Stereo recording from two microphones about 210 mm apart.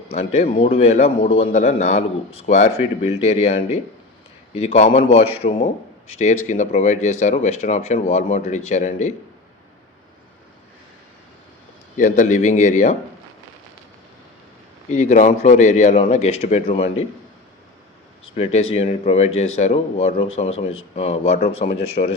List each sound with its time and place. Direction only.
0.1 s a man's voice: 30° left (ahead or behind)
11.9 s a man's voice: 35° left (ahead or behind)
14.8 s a man's voice: 35° left (ahead or behind)
18.3 s a man's voice: 30° left (ahead or behind)